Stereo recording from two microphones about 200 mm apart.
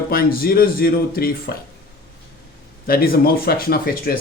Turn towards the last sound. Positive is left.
turn(degrees=50)  # may be behind; listen again after turning